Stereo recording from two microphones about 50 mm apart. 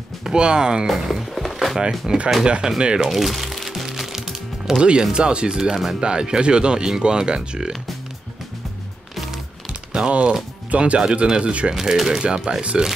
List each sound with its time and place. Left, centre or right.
0.2 s speech: centre
1.3 s a sound: centre
1.8 s speech: centre
3.1 s music: centre
5.0 s speech: centre
5.6 s speech: centre
5.9 s speech: centre
9.7 s a sound: centre
10.7 s speech: right